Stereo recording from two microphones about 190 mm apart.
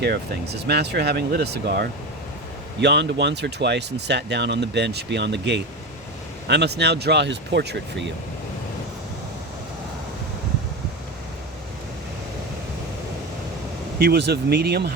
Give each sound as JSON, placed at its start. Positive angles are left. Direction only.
{"t": 0.0, "sound": "speech", "side_deg": -60}
{"t": 14.0, "sound": "speech", "side_deg": -60}